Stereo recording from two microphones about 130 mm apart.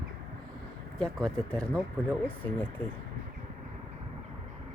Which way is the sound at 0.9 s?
5° left (ahead or behind).